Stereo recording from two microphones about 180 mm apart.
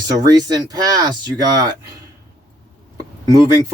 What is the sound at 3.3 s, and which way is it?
Speech, 20° right (ahead or behind).